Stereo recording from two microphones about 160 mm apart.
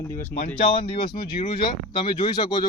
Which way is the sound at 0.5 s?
35° left (ahead or behind).